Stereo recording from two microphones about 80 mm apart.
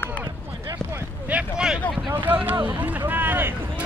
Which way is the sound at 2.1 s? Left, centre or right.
Right.